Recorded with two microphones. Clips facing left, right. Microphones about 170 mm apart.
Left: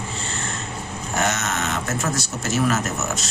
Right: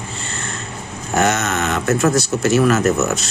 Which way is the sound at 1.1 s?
65° right (ahead or behind).